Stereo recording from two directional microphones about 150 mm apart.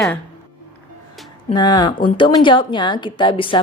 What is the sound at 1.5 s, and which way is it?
Speech, 25° left (ahead or behind).